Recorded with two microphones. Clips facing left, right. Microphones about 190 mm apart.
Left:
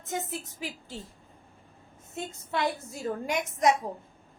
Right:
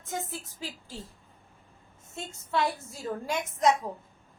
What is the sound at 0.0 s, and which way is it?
Speech, 20° left (ahead or behind).